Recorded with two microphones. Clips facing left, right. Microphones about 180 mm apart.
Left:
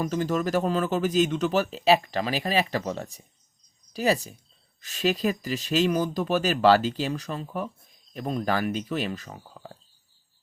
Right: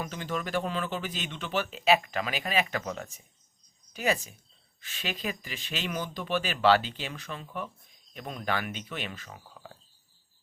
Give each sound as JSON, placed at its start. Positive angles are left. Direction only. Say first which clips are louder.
{"t": 0.0, "sound": "speech", "louder": "left 8 dB", "side_deg": 40}